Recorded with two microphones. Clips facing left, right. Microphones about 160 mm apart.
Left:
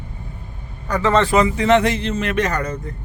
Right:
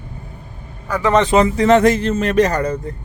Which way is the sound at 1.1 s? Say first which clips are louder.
Right 3 dB; 20° right (ahead or behind).